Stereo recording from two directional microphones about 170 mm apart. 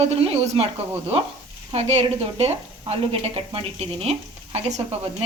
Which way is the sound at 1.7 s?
40° right (ahead or behind).